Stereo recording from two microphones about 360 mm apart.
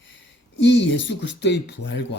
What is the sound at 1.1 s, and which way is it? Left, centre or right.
Speech, left.